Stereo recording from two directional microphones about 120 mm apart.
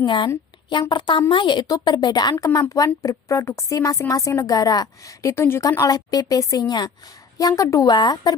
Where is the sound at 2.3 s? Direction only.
20° left (ahead or behind).